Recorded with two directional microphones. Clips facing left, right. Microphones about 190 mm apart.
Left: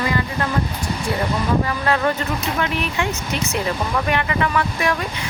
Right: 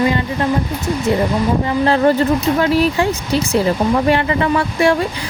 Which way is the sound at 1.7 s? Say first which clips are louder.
Right 7 dB; 30° right (ahead or behind).